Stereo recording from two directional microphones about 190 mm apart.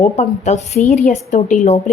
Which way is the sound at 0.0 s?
35° left (ahead or behind).